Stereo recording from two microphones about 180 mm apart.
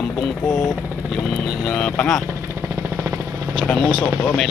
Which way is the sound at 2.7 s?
15° right (ahead or behind).